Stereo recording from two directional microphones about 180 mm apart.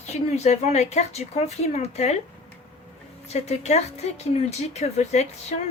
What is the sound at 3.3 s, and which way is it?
Speech, 35° left (ahead or behind).